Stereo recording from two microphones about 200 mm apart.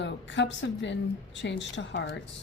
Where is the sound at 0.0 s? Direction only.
65° left (ahead or behind).